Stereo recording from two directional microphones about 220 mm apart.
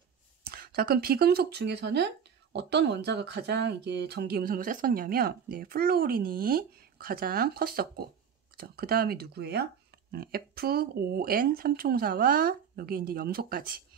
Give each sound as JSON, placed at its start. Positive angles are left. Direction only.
{"t": 0.4, "sound": "speech", "side_deg": -45}